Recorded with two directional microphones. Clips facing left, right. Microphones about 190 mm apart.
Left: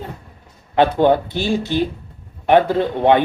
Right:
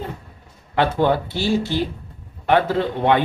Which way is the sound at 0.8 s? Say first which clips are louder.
Left 4 dB; 20° left (ahead or behind).